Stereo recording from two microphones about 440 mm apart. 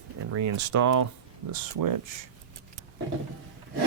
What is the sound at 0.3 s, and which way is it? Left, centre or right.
Speech, right.